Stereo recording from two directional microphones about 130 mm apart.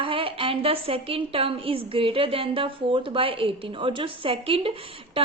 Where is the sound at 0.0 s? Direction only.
45° right (ahead or behind).